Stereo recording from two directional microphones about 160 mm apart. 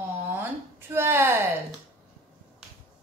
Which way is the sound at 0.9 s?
15° right (ahead or behind).